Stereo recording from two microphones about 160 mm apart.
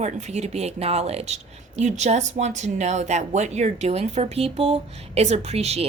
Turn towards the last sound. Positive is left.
turn(degrees=-40)  # may be behind; listen again after turning